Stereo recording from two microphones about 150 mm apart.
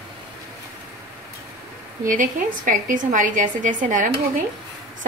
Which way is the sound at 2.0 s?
65° right (ahead or behind).